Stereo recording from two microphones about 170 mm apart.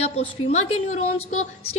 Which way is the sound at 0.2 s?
40° left (ahead or behind).